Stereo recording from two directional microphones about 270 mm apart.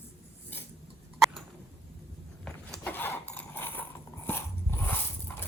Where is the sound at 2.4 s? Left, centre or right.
Centre.